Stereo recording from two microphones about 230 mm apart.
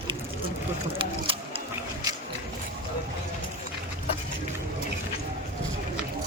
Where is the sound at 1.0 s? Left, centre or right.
Right.